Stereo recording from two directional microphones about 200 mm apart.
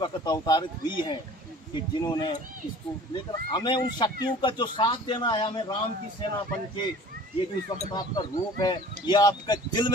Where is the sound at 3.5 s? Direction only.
20° left (ahead or behind).